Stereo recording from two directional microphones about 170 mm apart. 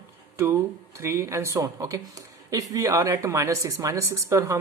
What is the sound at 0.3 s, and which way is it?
Speech, 15° right (ahead or behind).